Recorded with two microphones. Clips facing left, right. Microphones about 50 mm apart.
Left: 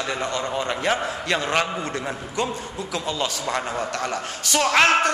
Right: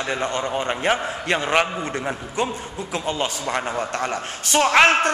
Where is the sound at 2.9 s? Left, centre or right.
Right.